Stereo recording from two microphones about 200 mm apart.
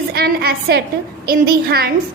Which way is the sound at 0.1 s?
50° right (ahead or behind).